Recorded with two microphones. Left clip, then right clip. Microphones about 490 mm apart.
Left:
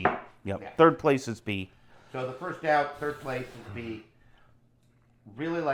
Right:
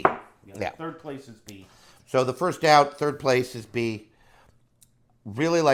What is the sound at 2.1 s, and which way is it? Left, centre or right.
Speech, right.